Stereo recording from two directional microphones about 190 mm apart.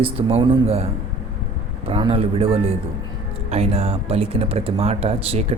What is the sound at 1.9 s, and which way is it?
Speech, 30° right (ahead or behind).